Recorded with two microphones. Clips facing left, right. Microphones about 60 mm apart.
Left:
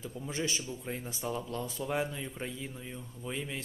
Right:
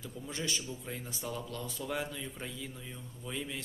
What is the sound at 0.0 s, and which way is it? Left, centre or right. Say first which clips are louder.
A man's voice: left 3 dB; left.